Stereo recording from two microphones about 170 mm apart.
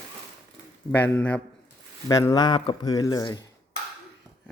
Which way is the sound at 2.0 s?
20° left (ahead or behind).